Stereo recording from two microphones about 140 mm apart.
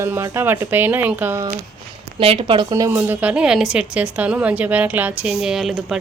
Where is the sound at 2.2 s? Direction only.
40° right (ahead or behind).